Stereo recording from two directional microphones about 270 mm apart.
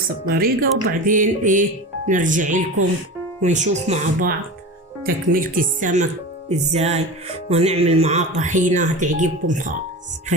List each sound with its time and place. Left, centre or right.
0.3 s speech: right